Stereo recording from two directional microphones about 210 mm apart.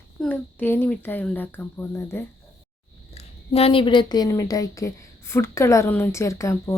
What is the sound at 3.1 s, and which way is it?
A woman's voice, 30° left (ahead or behind).